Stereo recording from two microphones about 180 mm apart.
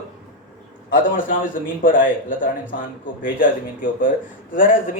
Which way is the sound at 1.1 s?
50° left (ahead or behind).